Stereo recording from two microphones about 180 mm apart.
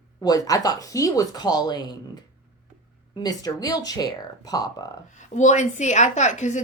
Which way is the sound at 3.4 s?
20° left (ahead or behind).